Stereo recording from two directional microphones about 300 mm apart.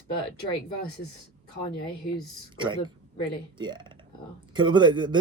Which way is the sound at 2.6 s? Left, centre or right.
Centre.